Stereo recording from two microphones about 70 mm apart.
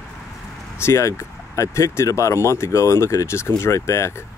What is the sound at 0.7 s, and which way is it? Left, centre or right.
Speech, left.